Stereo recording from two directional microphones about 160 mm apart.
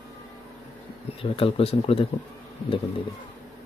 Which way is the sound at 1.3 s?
35° left (ahead or behind).